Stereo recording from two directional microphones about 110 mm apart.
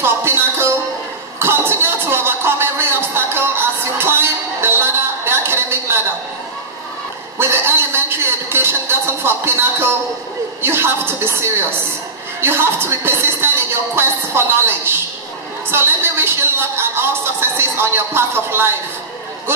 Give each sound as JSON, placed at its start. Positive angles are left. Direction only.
{"t": 0.0, "sound": "music", "side_deg": -20}
{"t": 7.3, "sound": "a sound", "side_deg": -20}
{"t": 8.5, "sound": "a woman's voice", "side_deg": -20}